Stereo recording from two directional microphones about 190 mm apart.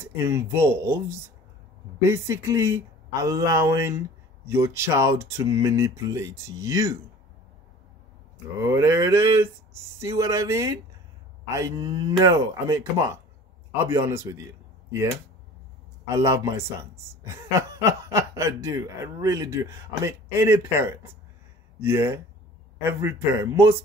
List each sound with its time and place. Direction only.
0.0 s speech: 15° right (ahead or behind)
8.5 s speech: 15° right (ahead or behind)
16.1 s speech: 15° right (ahead or behind)